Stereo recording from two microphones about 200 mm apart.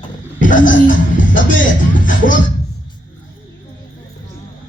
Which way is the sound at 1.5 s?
40° left (ahead or behind).